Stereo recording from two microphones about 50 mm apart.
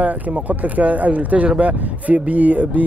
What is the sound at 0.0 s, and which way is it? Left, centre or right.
Speech, right.